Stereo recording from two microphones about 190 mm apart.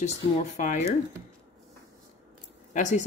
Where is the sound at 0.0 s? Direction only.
40° left (ahead or behind).